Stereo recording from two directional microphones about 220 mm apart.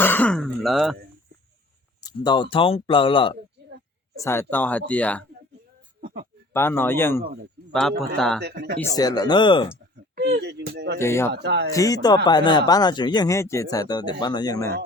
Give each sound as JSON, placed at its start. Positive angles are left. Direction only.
{"t": 0.0, "sound": "throat clearing", "side_deg": 10}
{"t": 2.0, "sound": "speech", "side_deg": 20}
{"t": 4.2, "sound": "speech", "side_deg": 10}
{"t": 6.5, "sound": "a man's voice", "side_deg": 10}
{"t": 8.4, "sound": "speech", "side_deg": -50}
{"t": 9.0, "sound": "speech", "side_deg": 15}
{"t": 10.2, "sound": "speech", "side_deg": -45}
{"t": 11.0, "sound": "speech", "side_deg": 10}
{"t": 11.4, "sound": "speech", "side_deg": -50}
{"t": 11.7, "sound": "speech", "side_deg": 15}